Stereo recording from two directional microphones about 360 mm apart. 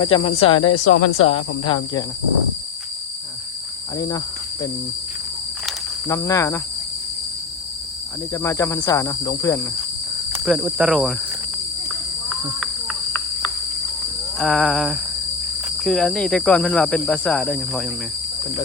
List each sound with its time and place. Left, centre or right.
0.0 s speech: centre
0.7 s speech: left
1.3 s speech: centre
3.9 s speech: centre
5.6 s snake: centre
8.3 s speech: centre
10.3 s speech: centre
12.5 s cricket: centre
14.3 s speech: centre